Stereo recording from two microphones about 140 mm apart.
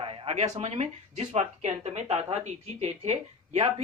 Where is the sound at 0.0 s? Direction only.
40° right (ahead or behind).